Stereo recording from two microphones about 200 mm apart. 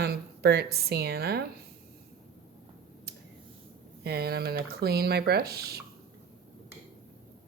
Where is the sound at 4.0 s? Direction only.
55° right (ahead or behind).